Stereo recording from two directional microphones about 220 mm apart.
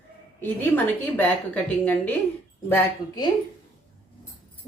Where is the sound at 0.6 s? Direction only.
10° left (ahead or behind).